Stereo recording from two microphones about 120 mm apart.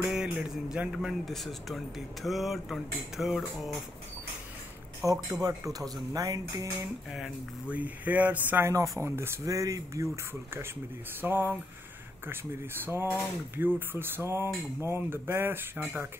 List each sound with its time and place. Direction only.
0.0 s mantra: 5° right (ahead or behind)
0.5 s a man's voice: 5° right (ahead or behind)
5.0 s speech: 30° right (ahead or behind)
7.1 s speech: 5° right (ahead or behind); by 10.0 s 30° right (ahead or behind)
11.1 s a sound: 20° right (ahead or behind)
12.8 s speech: 20° right (ahead or behind)